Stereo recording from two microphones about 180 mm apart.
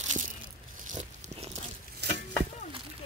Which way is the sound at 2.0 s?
70° right (ahead or behind).